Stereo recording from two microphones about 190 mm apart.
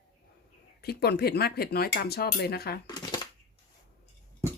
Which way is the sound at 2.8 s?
20° left (ahead or behind).